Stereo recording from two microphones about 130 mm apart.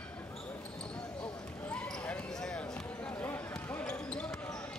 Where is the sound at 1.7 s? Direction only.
10° left (ahead or behind).